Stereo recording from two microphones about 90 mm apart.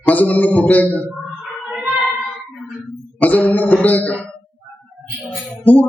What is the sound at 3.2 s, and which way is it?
Cough, 15° left (ahead or behind).